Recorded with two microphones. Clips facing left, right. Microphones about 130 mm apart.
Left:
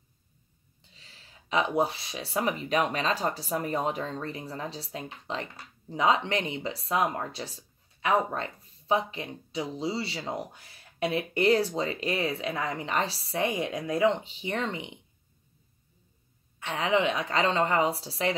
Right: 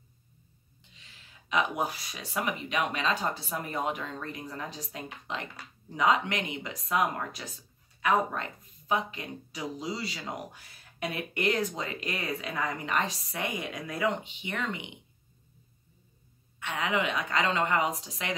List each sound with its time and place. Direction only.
0.9 s speech: 35° left (ahead or behind)
16.5 s speech: 35° left (ahead or behind)